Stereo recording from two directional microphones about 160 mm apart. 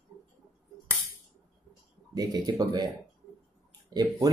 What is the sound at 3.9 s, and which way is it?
Speech, 25° right (ahead or behind).